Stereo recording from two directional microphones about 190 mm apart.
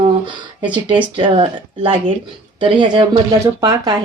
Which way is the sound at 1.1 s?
30° right (ahead or behind).